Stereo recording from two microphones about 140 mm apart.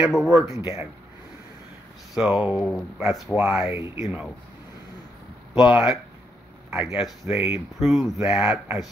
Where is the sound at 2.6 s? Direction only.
5° left (ahead or behind).